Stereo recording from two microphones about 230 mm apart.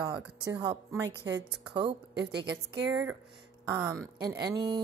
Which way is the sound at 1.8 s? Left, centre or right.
Right.